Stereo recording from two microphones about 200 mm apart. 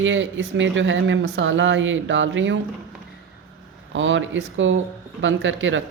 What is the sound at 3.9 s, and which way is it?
Speech, 70° right (ahead or behind).